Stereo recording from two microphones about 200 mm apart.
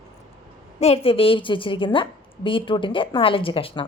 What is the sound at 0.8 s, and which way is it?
A woman's voice, 30° left (ahead or behind).